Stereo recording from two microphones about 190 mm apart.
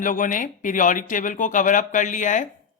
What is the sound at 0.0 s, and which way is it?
Speech, 45° left (ahead or behind).